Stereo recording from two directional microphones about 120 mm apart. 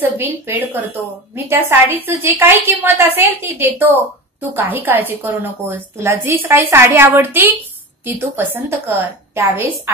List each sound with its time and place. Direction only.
0.0 s a woman's voice: 15° right (ahead or behind)